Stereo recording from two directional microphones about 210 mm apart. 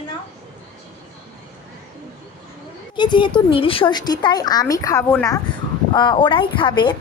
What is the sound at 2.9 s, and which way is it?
A woman's voice, 20° left (ahead or behind).